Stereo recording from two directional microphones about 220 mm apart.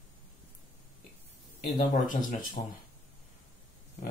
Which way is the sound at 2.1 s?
35° left (ahead or behind).